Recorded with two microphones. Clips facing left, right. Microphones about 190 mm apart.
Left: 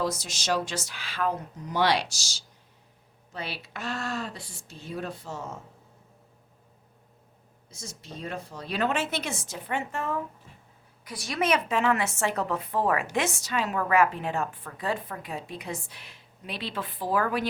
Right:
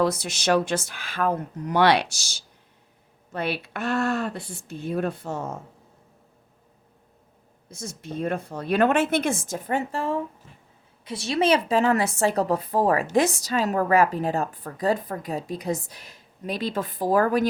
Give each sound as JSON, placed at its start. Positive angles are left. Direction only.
{"t": 0.0, "sound": "a woman's voice", "side_deg": -60}
{"t": 7.7, "sound": "a woman's voice", "side_deg": -55}